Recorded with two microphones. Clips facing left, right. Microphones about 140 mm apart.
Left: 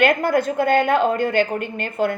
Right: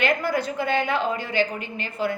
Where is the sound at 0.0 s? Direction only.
50° left (ahead or behind).